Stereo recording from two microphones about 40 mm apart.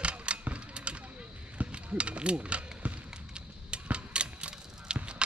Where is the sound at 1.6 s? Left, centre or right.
Right.